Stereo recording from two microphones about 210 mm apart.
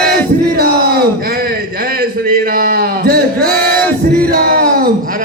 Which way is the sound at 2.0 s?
45° right (ahead or behind).